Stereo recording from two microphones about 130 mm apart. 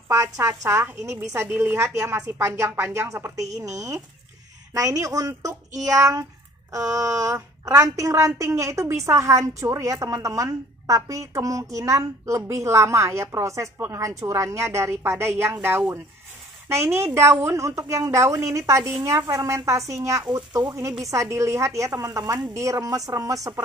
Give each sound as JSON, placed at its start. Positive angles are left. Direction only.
{"t": 0.1, "sound": "a woman's voice", "side_deg": -20}
{"t": 20.2, "sound": "speech", "side_deg": -35}
{"t": 21.0, "sound": "a woman's voice", "side_deg": -25}